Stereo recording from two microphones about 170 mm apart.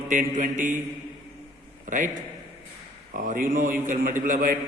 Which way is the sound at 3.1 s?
55° right (ahead or behind).